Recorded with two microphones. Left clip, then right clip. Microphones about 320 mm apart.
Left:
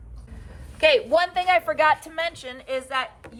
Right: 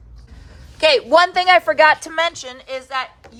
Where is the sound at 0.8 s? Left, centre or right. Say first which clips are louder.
Right 6 dB; centre.